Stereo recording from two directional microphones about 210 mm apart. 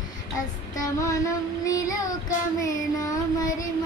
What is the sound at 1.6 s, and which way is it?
Child singing, 15° left (ahead or behind).